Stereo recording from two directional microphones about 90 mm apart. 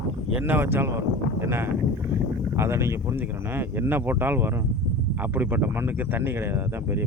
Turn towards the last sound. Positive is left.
turn(degrees=-25)  # may be behind; listen again after turning